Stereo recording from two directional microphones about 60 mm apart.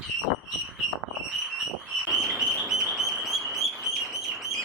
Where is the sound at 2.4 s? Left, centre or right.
Centre.